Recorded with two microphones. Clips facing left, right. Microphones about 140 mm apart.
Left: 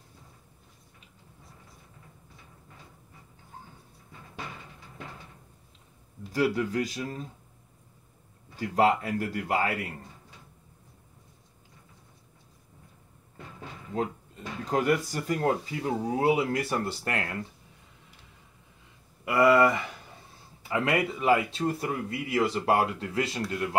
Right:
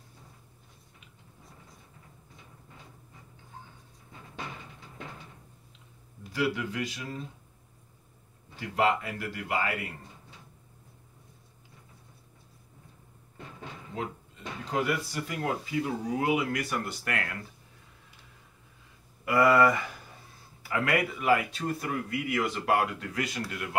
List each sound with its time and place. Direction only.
6.3 s speech: 40° left (ahead or behind)
8.5 s speech: 40° left (ahead or behind)
14.6 s speech: 40° left (ahead or behind)
19.2 s a man's voice: 20° left (ahead or behind)